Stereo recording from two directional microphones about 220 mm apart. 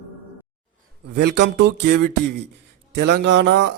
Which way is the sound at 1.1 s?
50° right (ahead or behind).